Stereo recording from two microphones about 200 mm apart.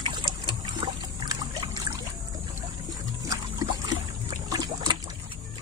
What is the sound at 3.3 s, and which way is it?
Boat, 20° right (ahead or behind).